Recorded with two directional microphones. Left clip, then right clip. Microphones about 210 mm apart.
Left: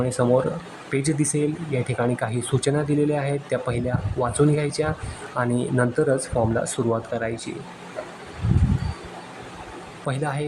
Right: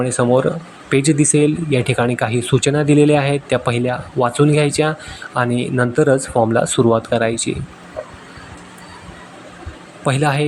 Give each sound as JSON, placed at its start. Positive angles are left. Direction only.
{"t": 0.0, "sound": "speech", "side_deg": -15}
{"t": 10.1, "sound": "a man's voice", "side_deg": -20}